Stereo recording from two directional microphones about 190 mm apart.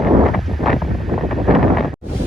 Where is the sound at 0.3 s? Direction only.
Centre (ahead or behind).